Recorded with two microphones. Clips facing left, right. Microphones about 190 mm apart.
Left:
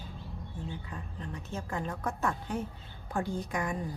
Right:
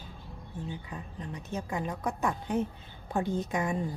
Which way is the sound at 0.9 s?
15° right (ahead or behind).